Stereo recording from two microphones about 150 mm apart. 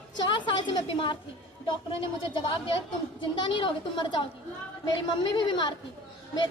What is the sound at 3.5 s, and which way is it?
A woman's voice, 35° left (ahead or behind).